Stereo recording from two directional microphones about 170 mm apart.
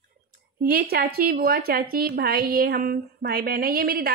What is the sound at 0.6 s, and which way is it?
A woman's voice, 60° right (ahead or behind).